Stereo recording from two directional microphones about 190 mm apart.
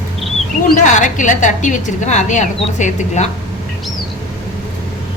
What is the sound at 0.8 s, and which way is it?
A woman's voice, 40° left (ahead or behind).